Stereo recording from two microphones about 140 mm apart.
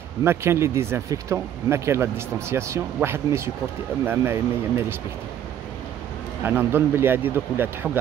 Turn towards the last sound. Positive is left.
turn(degrees=-15)  # may be behind; listen again after turning